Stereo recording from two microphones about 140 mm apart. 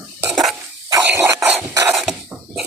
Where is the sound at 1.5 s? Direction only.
10° right (ahead or behind).